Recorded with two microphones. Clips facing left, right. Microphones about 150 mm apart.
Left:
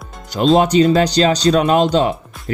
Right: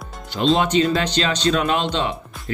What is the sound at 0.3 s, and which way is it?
Speech, 40° left (ahead or behind).